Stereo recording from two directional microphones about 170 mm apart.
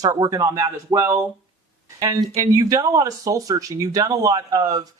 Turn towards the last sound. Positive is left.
turn(degrees=-20)  # may be behind; listen again after turning